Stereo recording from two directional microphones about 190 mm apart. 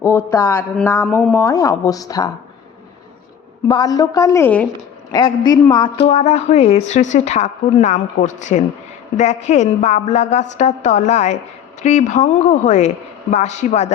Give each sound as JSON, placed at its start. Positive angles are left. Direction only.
{"t": 0.0, "sound": "speech", "side_deg": 15}
{"t": 1.0, "sound": "speech", "side_deg": 0}
{"t": 1.3, "sound": "a woman's voice", "side_deg": 15}
{"t": 3.7, "sound": "a woman's voice", "side_deg": 20}
{"t": 5.1, "sound": "a woman's voice", "side_deg": 25}
{"t": 6.1, "sound": "speech", "side_deg": 35}